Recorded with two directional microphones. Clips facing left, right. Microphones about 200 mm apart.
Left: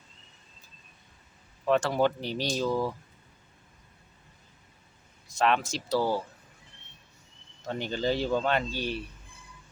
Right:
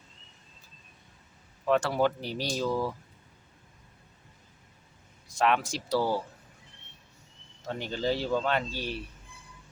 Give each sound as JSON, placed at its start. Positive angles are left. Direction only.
{"t": 1.7, "sound": "speech", "side_deg": -5}
{"t": 5.3, "sound": "speech", "side_deg": -10}
{"t": 6.0, "sound": "speech", "side_deg": 15}
{"t": 7.7, "sound": "speech", "side_deg": -5}